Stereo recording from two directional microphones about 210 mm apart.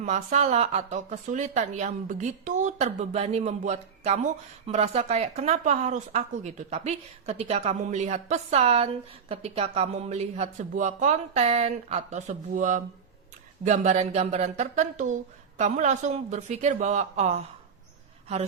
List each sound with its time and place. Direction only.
0.0 s a woman's voice: 35° right (ahead or behind)